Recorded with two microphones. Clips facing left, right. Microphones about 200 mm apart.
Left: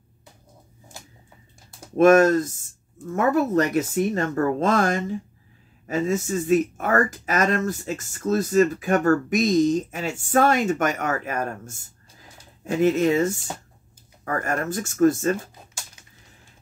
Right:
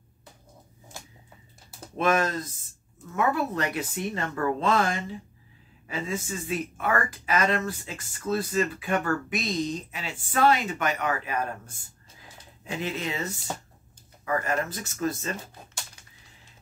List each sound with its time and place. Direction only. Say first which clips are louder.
2.0 s speech: left 10 dB; 45° left (ahead or behind)